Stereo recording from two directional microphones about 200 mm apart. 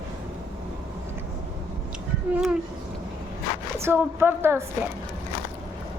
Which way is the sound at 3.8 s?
10° right (ahead or behind).